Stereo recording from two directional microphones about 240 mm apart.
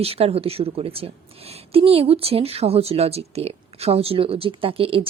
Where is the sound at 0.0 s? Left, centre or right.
Right.